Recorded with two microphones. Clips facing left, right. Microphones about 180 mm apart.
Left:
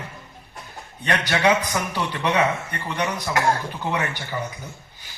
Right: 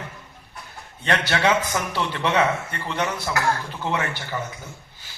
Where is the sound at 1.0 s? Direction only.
15° left (ahead or behind).